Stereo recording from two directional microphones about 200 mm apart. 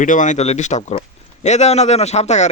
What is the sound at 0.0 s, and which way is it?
Speech, 40° left (ahead or behind).